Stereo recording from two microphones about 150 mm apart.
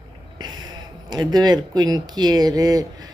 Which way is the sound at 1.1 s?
30° right (ahead or behind).